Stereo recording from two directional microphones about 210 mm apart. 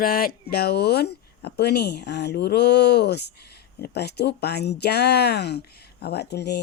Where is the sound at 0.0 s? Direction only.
45° left (ahead or behind).